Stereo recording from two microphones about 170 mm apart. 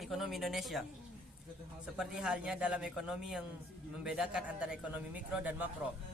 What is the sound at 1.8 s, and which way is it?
A man's voice, 5° right (ahead or behind).